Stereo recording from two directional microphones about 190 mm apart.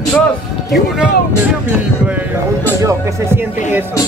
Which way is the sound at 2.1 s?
10° right (ahead or behind).